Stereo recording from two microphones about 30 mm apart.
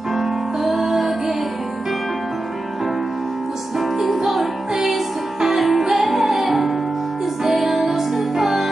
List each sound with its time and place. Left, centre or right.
0.1 s music: centre
3.7 s music: centre